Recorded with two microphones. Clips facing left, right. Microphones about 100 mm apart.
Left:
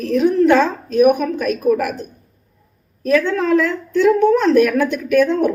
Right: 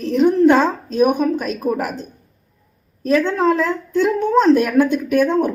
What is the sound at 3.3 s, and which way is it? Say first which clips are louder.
Speech: left 1 dB; 25° right (ahead or behind).